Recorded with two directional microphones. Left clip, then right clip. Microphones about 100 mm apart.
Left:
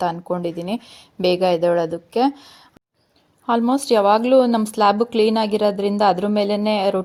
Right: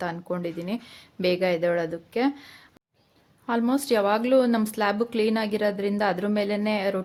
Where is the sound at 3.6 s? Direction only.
40° left (ahead or behind).